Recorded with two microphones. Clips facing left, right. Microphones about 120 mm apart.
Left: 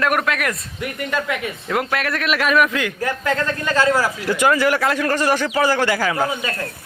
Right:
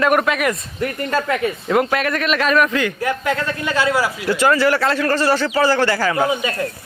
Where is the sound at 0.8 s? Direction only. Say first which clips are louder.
Right 3 dB; 35° right (ahead or behind).